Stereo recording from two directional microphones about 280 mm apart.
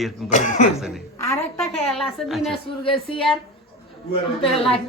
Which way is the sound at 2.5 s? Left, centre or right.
Centre.